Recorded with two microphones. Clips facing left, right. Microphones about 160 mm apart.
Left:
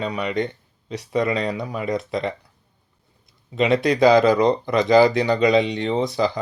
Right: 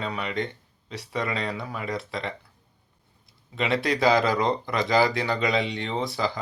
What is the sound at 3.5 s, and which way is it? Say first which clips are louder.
Speech: left 7 dB; 20° left (ahead or behind).